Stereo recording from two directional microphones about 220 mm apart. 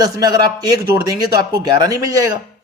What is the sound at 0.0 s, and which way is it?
A man's voice, 15° right (ahead or behind).